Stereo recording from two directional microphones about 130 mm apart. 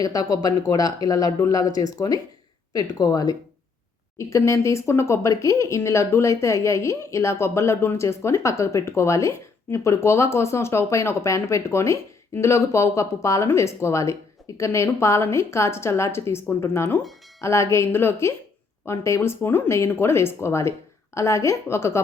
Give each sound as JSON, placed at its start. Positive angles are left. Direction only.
{"t": 0.0, "sound": "speech", "side_deg": 30}